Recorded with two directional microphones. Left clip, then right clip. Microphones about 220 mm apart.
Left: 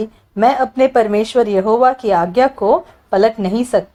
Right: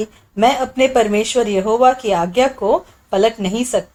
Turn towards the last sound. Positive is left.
turn(degrees=30)  # may be behind; listen again after turning